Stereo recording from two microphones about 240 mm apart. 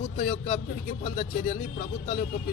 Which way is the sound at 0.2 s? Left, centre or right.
Left.